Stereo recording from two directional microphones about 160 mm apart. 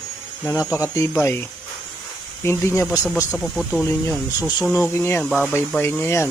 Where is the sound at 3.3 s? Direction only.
5° right (ahead or behind).